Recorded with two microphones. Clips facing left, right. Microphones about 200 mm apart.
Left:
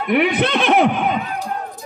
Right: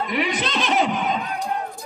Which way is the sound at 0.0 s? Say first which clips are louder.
Left 7 dB; 60° left (ahead or behind).